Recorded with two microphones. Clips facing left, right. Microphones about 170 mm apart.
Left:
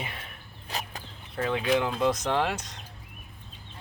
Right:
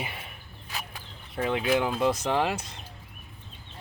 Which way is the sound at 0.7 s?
40° left (ahead or behind).